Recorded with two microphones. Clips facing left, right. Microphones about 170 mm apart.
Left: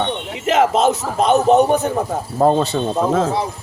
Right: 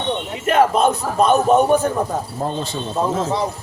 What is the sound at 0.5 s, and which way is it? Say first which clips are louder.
Speech: even; 90° left.